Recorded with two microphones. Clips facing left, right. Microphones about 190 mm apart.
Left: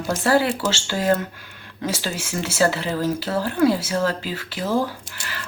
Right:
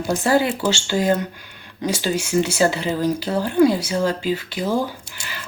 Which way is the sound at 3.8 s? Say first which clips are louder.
Right 1 dB; 15° right (ahead or behind).